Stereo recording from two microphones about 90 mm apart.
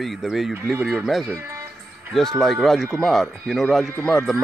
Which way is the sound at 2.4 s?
5° left (ahead or behind).